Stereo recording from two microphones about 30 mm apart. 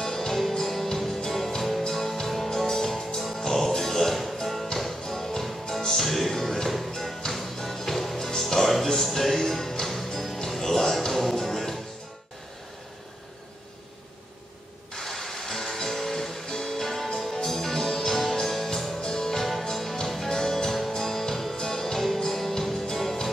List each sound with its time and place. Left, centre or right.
0.0 s music: centre
4.1 s music: centre
5.9 s music: centre
15.0 s music: centre